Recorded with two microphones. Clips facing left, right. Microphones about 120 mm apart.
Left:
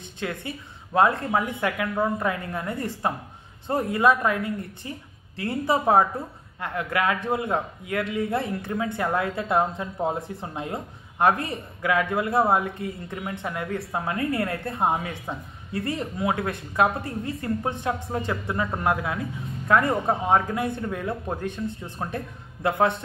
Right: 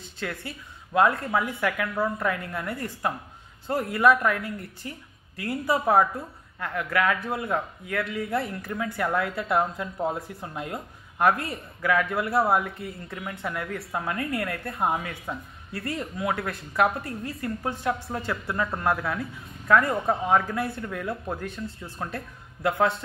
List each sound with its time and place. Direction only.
0.2 s a woman's voice: 20° left (ahead or behind)